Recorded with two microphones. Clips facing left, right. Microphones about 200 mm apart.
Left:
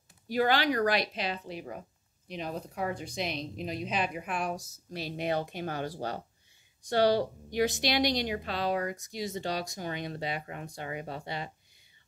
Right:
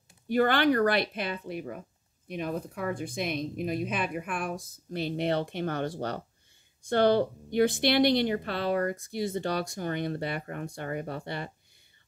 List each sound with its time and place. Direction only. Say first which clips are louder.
0.3 s a woman's voice: right 3 dB; 55° right (ahead or behind)